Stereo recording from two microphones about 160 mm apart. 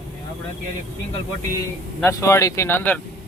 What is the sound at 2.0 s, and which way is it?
Speech, 20° left (ahead or behind).